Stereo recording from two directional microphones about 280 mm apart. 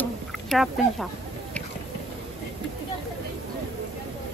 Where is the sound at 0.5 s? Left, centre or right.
Centre.